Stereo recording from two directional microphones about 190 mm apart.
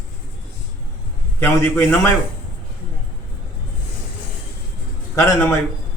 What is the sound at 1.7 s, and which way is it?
Speech, 10° left (ahead or behind).